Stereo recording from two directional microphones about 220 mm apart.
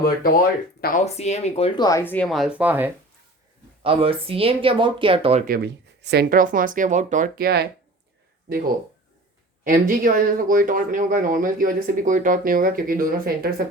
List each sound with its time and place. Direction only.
0.0 s speech: 40° left (ahead or behind)
1.0 s speech: 30° left (ahead or behind); by 2.9 s 10° right (ahead or behind)
3.8 s speech: 25° right (ahead or behind)
5.5 s speech: 50° right (ahead or behind)